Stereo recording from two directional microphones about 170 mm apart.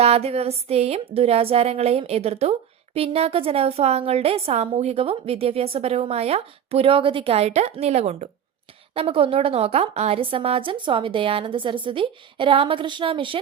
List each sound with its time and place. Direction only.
0.0 s a woman's voice: 35° right (ahead or behind)